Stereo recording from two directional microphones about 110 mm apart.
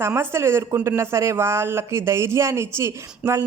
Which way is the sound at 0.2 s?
25° right (ahead or behind).